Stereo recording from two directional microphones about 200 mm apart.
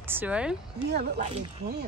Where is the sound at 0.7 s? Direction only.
55° right (ahead or behind).